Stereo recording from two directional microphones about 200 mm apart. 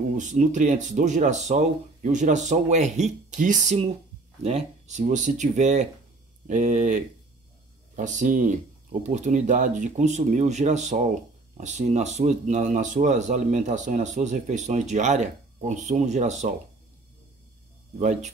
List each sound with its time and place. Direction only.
0.1 s speech: 40° right (ahead or behind)
17.9 s speech: 35° right (ahead or behind)